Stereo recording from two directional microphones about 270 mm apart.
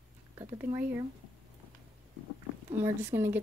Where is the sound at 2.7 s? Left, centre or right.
Centre.